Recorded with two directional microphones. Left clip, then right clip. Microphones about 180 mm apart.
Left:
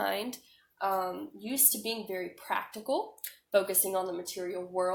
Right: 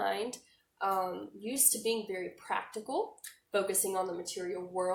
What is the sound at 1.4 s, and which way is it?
Speech, 25° left (ahead or behind).